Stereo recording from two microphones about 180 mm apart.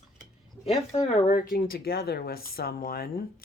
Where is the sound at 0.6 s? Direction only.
35° left (ahead or behind).